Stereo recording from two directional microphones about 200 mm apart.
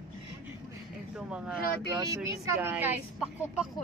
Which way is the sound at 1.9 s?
15° right (ahead or behind).